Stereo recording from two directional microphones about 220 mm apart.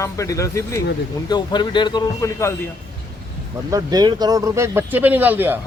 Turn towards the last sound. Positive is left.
turn(degrees=-10)  # may be behind; listen again after turning